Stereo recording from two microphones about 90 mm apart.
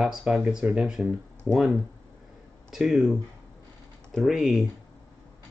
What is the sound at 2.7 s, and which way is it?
Speech, centre (ahead or behind).